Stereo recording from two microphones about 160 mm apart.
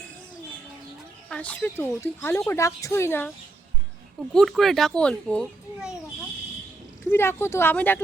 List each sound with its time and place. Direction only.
1.3 s speech: 10° left (ahead or behind)
4.4 s speech: centre (ahead or behind)
7.0 s speech: 15° left (ahead or behind)